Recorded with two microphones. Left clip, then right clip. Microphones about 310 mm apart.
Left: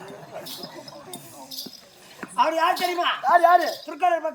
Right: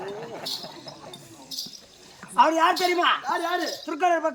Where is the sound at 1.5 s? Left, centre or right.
Centre.